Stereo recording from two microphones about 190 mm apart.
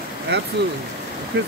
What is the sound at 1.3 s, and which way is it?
Speech, 65° right (ahead or behind).